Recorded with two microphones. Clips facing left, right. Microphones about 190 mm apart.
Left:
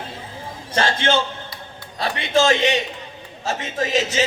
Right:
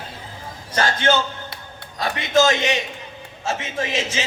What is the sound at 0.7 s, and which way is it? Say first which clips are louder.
A man's voice: even; 25° left (ahead or behind).